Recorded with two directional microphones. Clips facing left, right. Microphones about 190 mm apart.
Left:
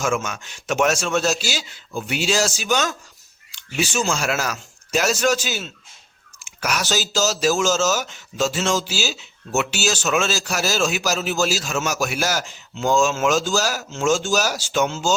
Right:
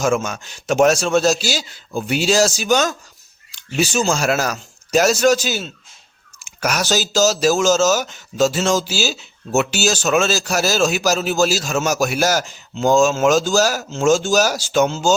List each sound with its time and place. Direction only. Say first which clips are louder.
0.0 s speech: right 4 dB; 35° right (ahead or behind)